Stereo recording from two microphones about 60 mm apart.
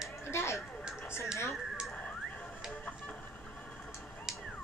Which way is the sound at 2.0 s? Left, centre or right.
Centre.